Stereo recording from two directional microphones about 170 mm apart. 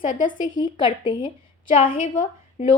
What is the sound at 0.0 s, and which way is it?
Speech, 50° left (ahead or behind).